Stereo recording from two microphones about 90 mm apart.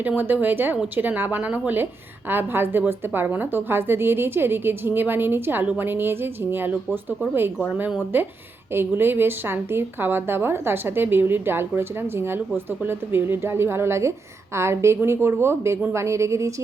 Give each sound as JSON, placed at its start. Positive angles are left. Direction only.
{"t": 0.2, "sound": "a woman's voice", "side_deg": -20}
{"t": 8.1, "sound": "a woman's voice", "side_deg": -20}